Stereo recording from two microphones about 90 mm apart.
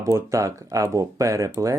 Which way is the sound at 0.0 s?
35° right (ahead or behind).